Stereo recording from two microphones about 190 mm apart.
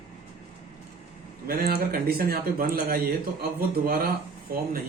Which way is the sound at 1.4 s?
50° right (ahead or behind).